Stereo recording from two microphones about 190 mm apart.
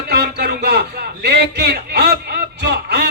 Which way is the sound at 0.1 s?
60° right (ahead or behind).